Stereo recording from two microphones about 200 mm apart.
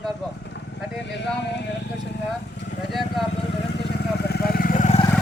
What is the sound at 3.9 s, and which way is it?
Vehicle, 55° left (ahead or behind).